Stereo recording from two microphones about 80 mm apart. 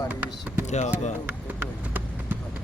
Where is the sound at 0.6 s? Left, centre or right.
Right.